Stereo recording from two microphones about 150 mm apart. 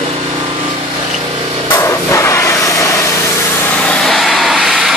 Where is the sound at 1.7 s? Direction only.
20° left (ahead or behind).